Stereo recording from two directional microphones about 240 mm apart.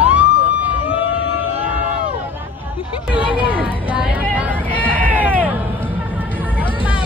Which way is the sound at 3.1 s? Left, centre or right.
Centre.